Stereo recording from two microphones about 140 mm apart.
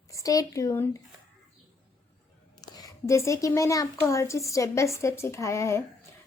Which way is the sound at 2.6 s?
25° left (ahead or behind).